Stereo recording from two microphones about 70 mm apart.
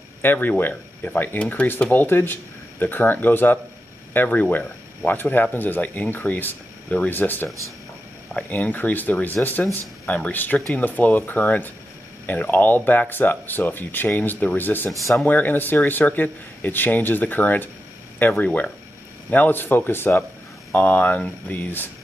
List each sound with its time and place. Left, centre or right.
0.2 s speech: left
8.3 s speech: centre
14.9 s speech: centre
15.2 s speech: left
20.7 s speech: left